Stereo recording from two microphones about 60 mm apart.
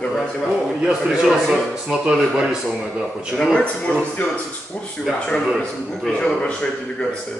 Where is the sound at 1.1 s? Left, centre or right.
Centre.